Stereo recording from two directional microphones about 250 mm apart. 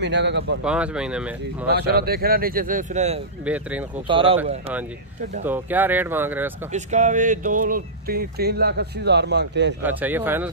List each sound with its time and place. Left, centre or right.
0.0 s speech: right
0.7 s speech: centre
1.7 s speech: right
3.4 s speech: centre
4.1 s speech: right
5.4 s speech: centre
6.7 s speech: right
9.8 s speech: centre